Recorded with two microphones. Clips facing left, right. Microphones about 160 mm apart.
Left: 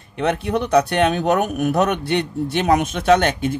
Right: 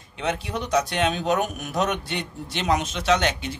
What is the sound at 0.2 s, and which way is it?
Speech, 60° left (ahead or behind).